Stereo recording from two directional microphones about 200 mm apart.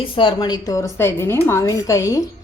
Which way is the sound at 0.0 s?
25° left (ahead or behind).